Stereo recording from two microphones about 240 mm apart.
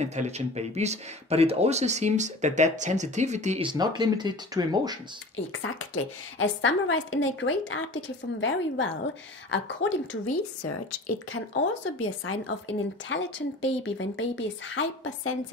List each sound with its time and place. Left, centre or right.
0.0 s speech: right
5.3 s a woman's voice: left
10.6 s a woman's voice: left